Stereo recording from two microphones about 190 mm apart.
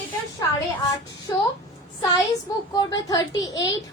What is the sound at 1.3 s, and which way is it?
Speech, 15° left (ahead or behind).